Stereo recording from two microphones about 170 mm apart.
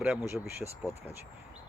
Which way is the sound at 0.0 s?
10° right (ahead or behind).